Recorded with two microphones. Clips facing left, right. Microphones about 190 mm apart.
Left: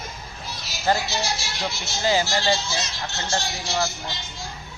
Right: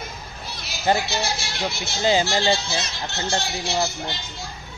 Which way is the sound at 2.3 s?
20° right (ahead or behind).